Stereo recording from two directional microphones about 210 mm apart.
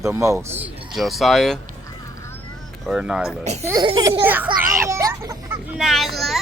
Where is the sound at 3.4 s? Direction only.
35° right (ahead or behind).